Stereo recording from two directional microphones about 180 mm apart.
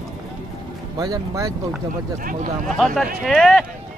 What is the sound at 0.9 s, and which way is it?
Speech, 20° right (ahead or behind).